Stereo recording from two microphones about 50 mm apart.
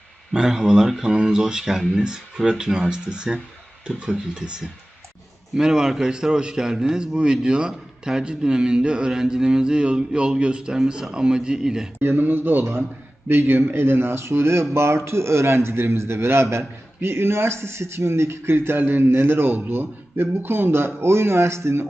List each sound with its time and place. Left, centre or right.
0.3 s a man's voice: centre
11.9 s speech: right